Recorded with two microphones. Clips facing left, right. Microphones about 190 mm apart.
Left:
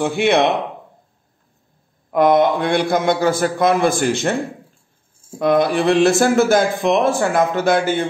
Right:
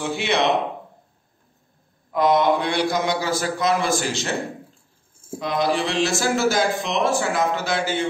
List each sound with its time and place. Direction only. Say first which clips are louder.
0.0 s speech: left 7 dB; 55° left (ahead or behind)
2.0 s a man's voice: left 4 dB; 55° left (ahead or behind)
5.4 s speech: left 7 dB; 55° left (ahead or behind)